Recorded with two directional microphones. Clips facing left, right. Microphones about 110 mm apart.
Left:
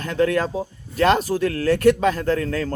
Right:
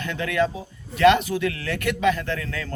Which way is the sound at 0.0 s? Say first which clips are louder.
Left 4 dB; 40° left (ahead or behind).